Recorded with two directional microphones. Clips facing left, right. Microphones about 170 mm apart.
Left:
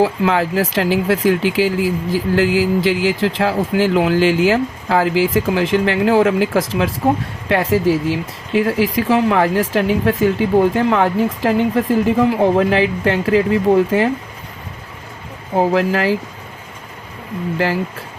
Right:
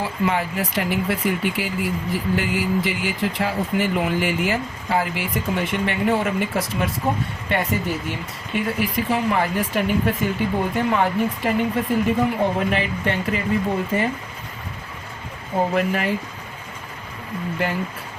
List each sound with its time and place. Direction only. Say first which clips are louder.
0.0 s speech: left 7 dB; 90° left
15.7 s speech: left 6 dB; 90° left